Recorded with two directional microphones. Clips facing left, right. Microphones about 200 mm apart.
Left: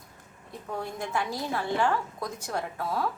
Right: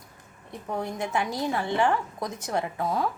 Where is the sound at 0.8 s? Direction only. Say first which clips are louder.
Right 3 dB; 20° right (ahead or behind).